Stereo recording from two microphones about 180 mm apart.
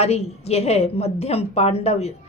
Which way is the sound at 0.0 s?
35° left (ahead or behind).